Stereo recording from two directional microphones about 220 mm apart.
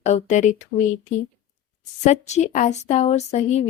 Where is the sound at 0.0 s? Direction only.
30° left (ahead or behind).